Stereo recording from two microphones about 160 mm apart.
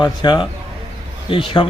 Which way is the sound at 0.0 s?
30° left (ahead or behind).